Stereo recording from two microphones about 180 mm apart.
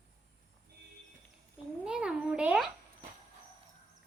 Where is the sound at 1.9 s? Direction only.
5° right (ahead or behind).